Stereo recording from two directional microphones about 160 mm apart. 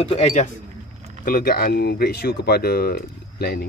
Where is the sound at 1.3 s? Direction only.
65° left (ahead or behind).